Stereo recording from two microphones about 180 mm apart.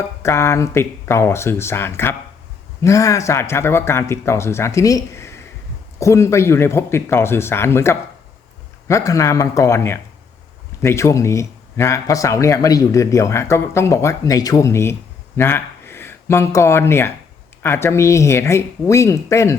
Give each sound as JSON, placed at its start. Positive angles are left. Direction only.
{"t": 0.2, "sound": "speech", "side_deg": 15}